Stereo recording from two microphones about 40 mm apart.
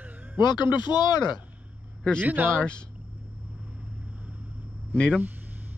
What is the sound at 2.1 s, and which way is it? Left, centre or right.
Speech, right.